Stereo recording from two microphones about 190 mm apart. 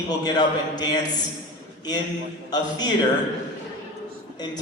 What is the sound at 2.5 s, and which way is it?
Speech, 20° left (ahead or behind).